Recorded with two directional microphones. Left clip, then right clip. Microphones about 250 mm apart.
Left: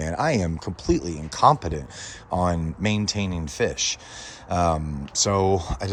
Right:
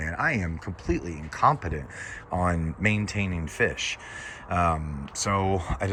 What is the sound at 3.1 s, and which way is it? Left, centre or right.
Speech, left.